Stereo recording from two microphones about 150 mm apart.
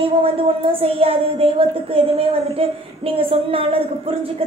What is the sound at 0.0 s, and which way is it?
A woman's voice, 40° right (ahead or behind).